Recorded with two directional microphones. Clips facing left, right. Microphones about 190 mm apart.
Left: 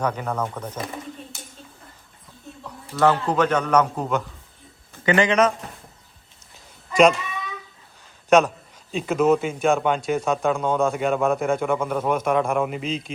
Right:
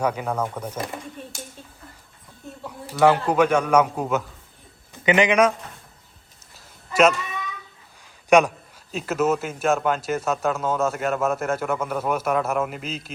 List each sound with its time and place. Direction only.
0.0 s a man's voice: 10° right (ahead or behind)
2.6 s a man's voice: 10° right (ahead or behind)
8.3 s a man's voice: 10° right (ahead or behind)